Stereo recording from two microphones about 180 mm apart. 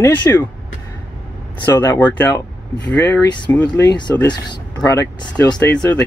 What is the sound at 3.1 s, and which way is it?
Speech, 20° left (ahead or behind).